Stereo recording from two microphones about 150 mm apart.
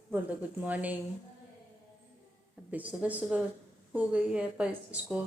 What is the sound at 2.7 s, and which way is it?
Speech, 10° right (ahead or behind).